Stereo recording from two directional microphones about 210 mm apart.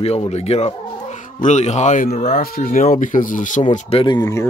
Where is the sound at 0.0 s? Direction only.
30° left (ahead or behind).